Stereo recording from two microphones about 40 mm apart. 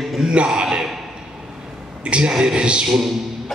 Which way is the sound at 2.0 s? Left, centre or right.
Right.